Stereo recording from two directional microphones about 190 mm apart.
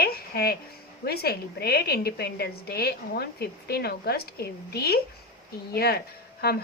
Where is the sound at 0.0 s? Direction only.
55° left (ahead or behind).